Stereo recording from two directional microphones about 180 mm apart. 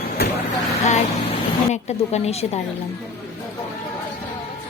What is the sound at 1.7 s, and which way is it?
Speech, 40° left (ahead or behind).